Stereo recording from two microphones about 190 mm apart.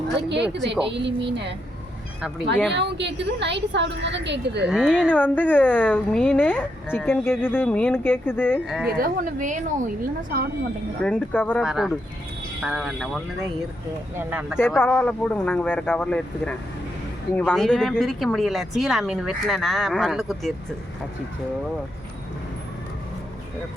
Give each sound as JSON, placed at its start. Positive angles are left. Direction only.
{"t": 0.2, "sound": "a woman's voice", "side_deg": -65}
{"t": 2.7, "sound": "a woman's voice", "side_deg": -65}
{"t": 4.6, "sound": "speech", "side_deg": -5}
{"t": 5.1, "sound": "a woman's voice", "side_deg": 10}
{"t": 8.6, "sound": "speech", "side_deg": 0}
{"t": 8.9, "sound": "a woman's voice", "side_deg": -50}
{"t": 11.0, "sound": "a woman's voice", "side_deg": 10}
{"t": 11.6, "sound": "speech", "side_deg": -5}
{"t": 14.8, "sound": "a woman's voice", "side_deg": 5}